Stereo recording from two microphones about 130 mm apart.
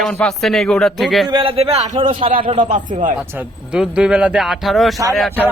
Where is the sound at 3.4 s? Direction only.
5° right (ahead or behind).